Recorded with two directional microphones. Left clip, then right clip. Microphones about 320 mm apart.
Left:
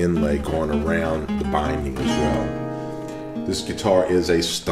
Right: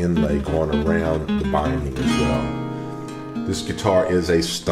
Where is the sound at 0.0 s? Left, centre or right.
Left.